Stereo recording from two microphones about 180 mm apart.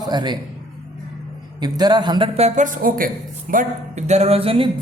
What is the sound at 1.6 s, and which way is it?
Speech, 25° right (ahead or behind).